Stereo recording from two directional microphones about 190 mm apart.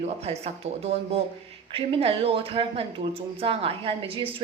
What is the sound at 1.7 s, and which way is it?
A woman's voice, 30° right (ahead or behind).